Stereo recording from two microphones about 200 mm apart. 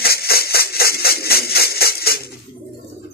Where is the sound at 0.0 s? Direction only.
50° left (ahead or behind).